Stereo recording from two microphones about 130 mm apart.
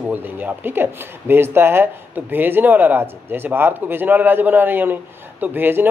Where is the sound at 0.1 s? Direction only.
15° right (ahead or behind).